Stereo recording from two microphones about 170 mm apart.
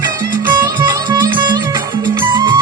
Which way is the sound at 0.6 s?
20° right (ahead or behind).